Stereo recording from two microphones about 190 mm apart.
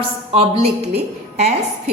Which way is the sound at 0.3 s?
30° right (ahead or behind).